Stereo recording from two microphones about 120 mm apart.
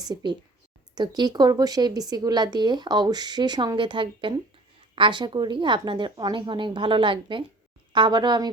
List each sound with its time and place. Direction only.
0.0 s speech: 35° right (ahead or behind)